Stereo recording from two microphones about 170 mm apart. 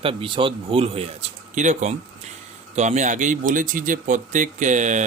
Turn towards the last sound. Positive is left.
turn(degrees=-45)  # may be behind; listen again after turning